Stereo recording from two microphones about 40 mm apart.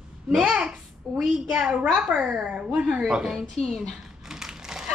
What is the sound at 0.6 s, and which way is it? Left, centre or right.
A child's voice, right.